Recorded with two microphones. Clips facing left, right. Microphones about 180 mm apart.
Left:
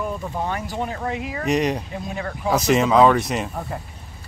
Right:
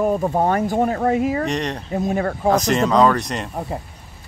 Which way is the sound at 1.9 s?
45° right (ahead or behind).